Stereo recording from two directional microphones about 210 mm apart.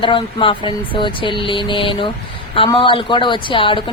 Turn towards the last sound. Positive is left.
turn(degrees=25)  # may be behind; listen again after turning